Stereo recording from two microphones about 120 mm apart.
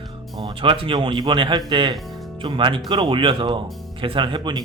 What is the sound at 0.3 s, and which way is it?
Speech, 45° right (ahead or behind).